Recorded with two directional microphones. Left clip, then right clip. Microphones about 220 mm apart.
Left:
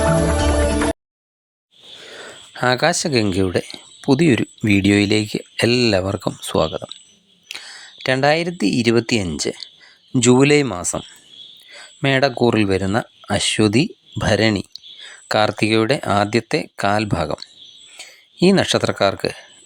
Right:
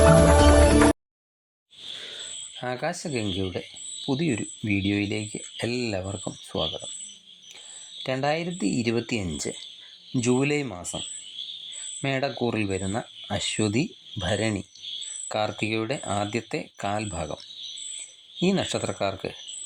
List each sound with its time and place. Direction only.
0.0 s music: centre (ahead or behind)
2.1 s speech: 30° left (ahead or behind)
11.7 s speech: 25° left (ahead or behind)